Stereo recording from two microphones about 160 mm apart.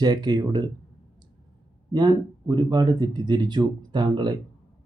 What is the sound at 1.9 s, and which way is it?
A man's voice, 25° right (ahead or behind).